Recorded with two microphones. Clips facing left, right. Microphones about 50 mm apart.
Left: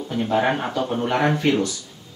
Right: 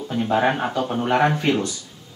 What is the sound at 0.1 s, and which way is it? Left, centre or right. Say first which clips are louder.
Speech: right 1 dB; centre.